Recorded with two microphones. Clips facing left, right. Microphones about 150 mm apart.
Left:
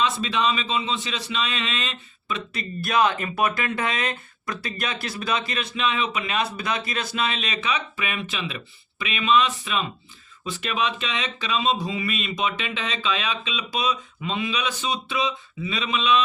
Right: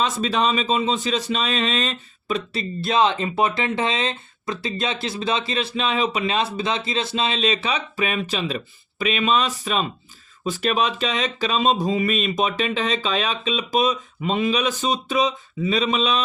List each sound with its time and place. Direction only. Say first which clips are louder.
0.0 s a man's voice: right 2 dB; 40° right (ahead or behind)